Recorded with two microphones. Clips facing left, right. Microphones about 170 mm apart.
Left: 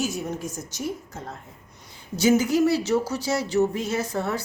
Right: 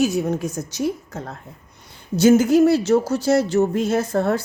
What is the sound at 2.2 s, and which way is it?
Speech, 50° right (ahead or behind).